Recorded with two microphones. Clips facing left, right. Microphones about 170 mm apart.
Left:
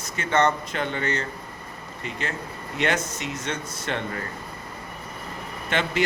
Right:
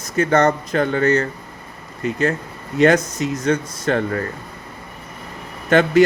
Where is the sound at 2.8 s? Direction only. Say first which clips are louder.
Right 11 dB; 40° right (ahead or behind).